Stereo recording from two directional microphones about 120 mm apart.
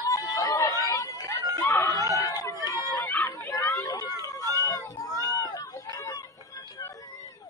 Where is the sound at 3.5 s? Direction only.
25° left (ahead or behind).